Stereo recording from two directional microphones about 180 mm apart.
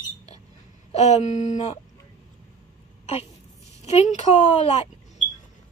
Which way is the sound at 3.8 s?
35° left (ahead or behind).